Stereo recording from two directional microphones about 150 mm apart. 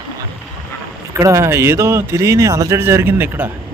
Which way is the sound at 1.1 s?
20° right (ahead or behind).